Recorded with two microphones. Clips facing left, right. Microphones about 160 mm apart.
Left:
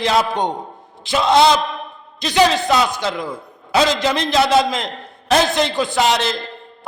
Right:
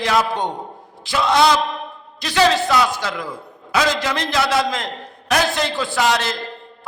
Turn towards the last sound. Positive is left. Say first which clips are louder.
# left 2 dB
turn(degrees=20)  # may be behind; listen again after turning